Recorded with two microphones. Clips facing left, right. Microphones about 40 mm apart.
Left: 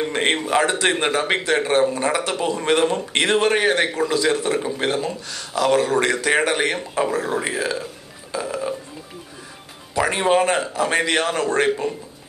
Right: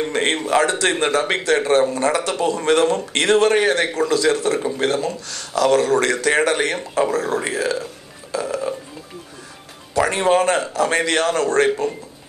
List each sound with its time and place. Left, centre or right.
0.0 s a man's voice: centre
7.7 s burping: centre
9.9 s a man's voice: centre